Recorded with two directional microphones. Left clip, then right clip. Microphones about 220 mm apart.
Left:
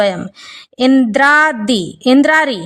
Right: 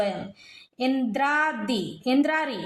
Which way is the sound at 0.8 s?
45° left (ahead or behind).